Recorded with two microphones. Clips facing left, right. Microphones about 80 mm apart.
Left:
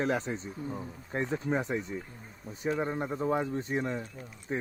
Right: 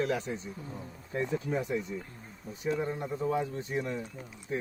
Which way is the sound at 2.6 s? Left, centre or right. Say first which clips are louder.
Left 1 dB; left.